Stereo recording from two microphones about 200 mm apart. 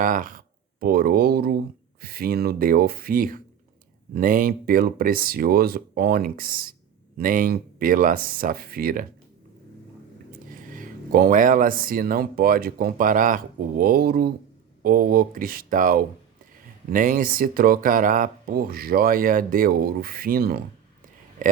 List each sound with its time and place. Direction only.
0.0 s speech: 45° right (ahead or behind)
10.5 s speech: 45° right (ahead or behind)